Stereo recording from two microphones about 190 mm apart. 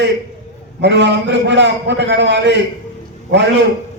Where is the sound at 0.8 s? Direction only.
70° right (ahead or behind).